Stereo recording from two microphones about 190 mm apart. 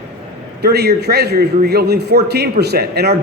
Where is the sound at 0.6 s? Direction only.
55° right (ahead or behind).